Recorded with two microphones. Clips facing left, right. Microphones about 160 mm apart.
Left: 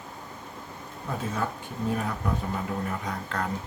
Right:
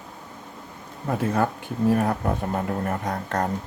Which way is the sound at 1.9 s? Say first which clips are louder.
Right 7 dB; 55° right (ahead or behind).